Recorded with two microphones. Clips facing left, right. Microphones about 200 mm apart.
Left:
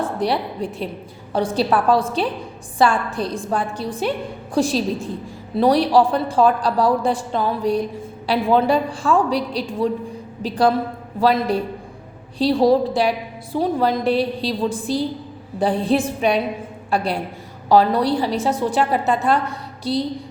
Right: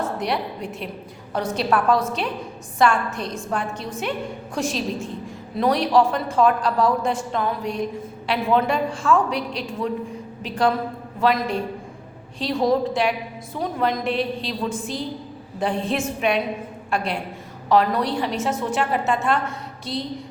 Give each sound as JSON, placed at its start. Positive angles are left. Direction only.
{"t": 0.0, "sound": "a woman's voice", "side_deg": 30}